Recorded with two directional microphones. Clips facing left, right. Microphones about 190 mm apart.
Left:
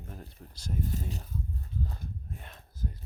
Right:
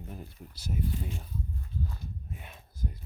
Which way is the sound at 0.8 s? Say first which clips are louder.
Even; 45° left (ahead or behind).